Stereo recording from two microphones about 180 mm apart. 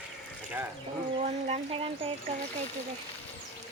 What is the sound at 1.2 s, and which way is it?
Speech, 35° right (ahead or behind).